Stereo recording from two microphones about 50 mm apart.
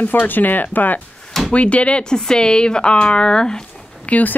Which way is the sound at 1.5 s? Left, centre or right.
Left.